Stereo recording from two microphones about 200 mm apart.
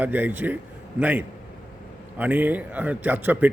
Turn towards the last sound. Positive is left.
turn(degrees=-10)  # may be behind; listen again after turning